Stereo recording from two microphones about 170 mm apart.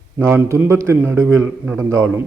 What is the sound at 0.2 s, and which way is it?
Speech, 15° right (ahead or behind).